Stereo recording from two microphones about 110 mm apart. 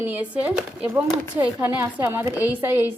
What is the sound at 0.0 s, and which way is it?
A woman's voice, 15° right (ahead or behind).